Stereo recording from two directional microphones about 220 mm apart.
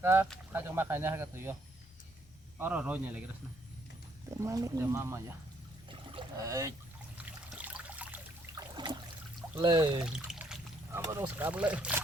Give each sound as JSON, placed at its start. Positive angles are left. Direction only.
{"t": 0.0, "sound": "speech", "side_deg": -10}
{"t": 2.6, "sound": "speech", "side_deg": -5}
{"t": 4.3, "sound": "speech", "side_deg": -15}
{"t": 5.9, "sound": "boat", "side_deg": -20}
{"t": 7.6, "sound": "trickle", "side_deg": -5}
{"t": 8.5, "sound": "trickle", "side_deg": -20}
{"t": 9.6, "sound": "speech", "side_deg": -20}
{"t": 10.0, "sound": "pour", "side_deg": -5}
{"t": 11.0, "sound": "speech", "side_deg": -15}